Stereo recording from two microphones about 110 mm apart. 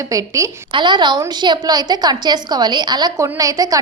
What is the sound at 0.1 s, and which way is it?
Speech, 30° right (ahead or behind).